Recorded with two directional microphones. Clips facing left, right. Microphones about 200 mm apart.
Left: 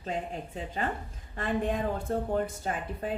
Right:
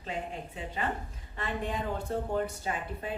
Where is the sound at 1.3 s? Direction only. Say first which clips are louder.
Left 5 dB; 45° left (ahead or behind).